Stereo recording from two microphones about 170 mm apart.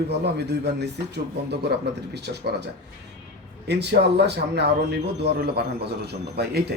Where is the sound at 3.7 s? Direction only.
80° right.